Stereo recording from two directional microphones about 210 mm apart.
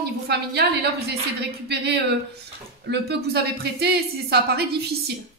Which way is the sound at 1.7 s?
50° right (ahead or behind).